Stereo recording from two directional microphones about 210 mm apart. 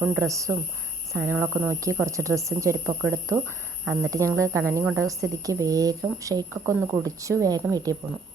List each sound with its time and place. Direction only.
0.2 s a woman's voice: 15° right (ahead or behind)